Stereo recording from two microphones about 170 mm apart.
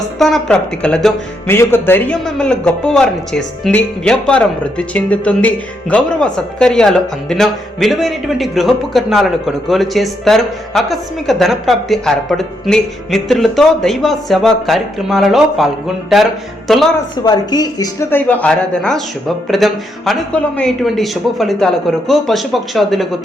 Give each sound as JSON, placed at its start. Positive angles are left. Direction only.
{"t": 0.2, "sound": "speech", "side_deg": 0}
{"t": 17.2, "sound": "speech", "side_deg": 25}
{"t": 18.1, "sound": "speech", "side_deg": 10}